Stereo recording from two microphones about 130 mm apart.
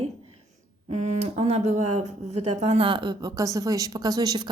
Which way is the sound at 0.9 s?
60° right (ahead or behind).